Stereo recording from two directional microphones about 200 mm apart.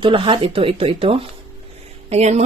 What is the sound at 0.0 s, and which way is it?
A woman's voice, 25° right (ahead or behind).